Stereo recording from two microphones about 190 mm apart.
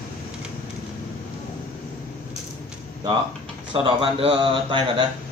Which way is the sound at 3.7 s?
30° right (ahead or behind).